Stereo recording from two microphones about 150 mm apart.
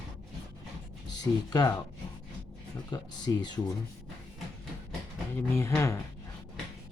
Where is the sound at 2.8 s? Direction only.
25° left (ahead or behind).